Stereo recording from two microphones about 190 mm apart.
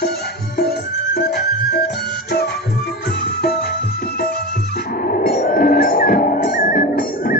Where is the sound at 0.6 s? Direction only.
55° left (ahead or behind).